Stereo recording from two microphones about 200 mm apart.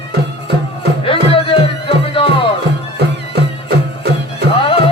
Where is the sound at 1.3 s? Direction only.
25° left (ahead or behind).